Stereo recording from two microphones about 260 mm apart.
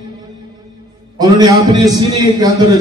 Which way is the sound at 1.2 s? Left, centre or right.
Centre.